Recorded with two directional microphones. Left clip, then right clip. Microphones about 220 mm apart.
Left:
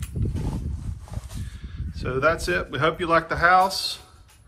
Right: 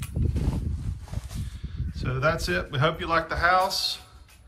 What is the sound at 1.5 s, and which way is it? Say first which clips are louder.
A man's voice: even; 5° right (ahead or behind).